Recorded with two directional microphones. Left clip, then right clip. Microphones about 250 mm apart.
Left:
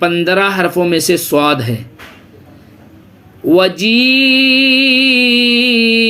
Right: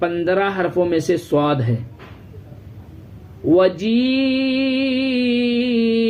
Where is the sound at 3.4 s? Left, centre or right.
Centre.